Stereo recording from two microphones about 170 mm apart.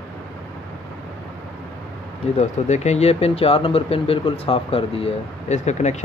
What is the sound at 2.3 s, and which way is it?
Speech, 45° left (ahead or behind).